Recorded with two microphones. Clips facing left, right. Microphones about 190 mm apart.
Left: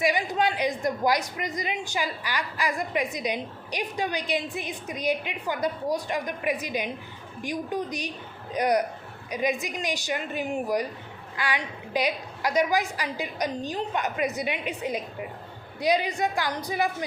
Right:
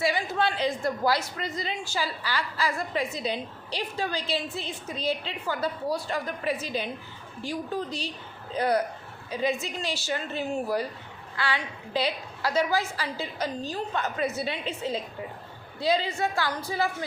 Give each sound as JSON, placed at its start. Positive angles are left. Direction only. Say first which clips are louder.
{"t": 0.0, "sound": "a woman's voice", "louder": "left 2 dB", "side_deg": 15}